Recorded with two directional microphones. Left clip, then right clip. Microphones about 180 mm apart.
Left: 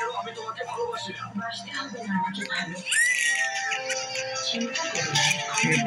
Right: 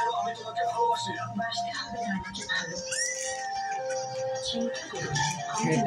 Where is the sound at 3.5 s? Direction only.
35° left (ahead or behind).